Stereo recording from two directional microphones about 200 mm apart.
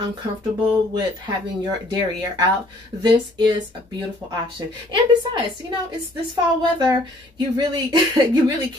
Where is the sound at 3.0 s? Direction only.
20° right (ahead or behind).